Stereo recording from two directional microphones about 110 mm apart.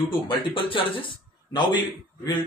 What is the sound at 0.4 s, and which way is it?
A man's voice, 55° left (ahead or behind).